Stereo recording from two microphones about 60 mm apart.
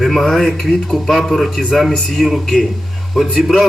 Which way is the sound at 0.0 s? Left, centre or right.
Centre.